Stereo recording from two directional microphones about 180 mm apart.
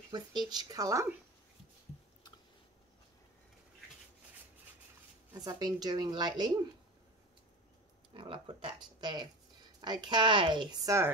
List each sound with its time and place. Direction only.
0.1 s a woman's voice: 25° right (ahead or behind)
5.3 s a woman's voice: 20° right (ahead or behind)
8.1 s a woman's voice: 25° right (ahead or behind)